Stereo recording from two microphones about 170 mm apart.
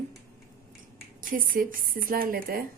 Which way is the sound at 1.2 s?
55° right (ahead or behind).